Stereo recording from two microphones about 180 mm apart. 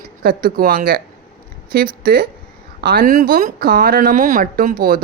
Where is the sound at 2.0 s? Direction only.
55° right (ahead or behind).